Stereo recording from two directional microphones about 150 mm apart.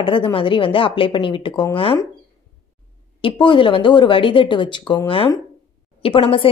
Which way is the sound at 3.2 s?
35° left (ahead or behind).